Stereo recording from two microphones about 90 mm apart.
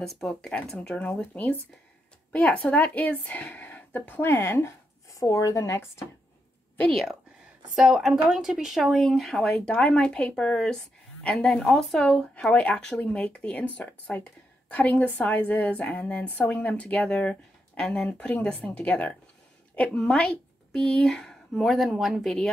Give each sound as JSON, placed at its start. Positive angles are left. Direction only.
{"t": 0.0, "sound": "a woman's voice", "side_deg": 5}
{"t": 7.7, "sound": "a woman's voice", "side_deg": -5}